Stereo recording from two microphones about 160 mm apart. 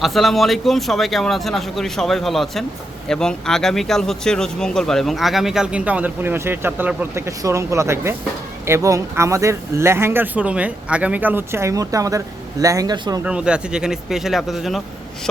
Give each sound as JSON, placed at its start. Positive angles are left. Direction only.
{"t": 0.0, "sound": "speech", "side_deg": 0}
{"t": 13.2, "sound": "speech", "side_deg": -5}